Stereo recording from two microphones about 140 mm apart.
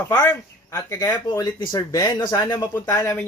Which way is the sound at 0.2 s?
15° left (ahead or behind).